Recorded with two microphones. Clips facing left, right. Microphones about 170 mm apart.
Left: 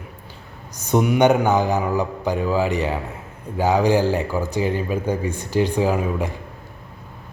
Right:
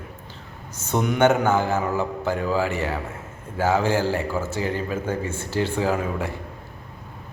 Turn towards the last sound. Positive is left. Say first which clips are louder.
# left 3 dB
turn(degrees=15)  # may be behind; listen again after turning